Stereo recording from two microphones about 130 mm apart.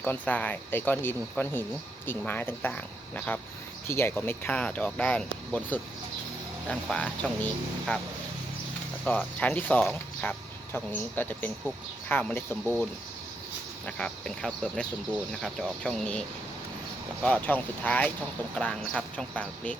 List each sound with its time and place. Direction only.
0.0 s speech: 10° left (ahead or behind)
9.0 s speech: 10° left (ahead or behind)
13.8 s speech: 5° left (ahead or behind)
17.2 s speech: 10° left (ahead or behind)